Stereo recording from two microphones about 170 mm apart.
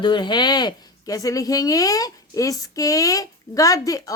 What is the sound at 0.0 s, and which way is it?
Speech, 25° left (ahead or behind).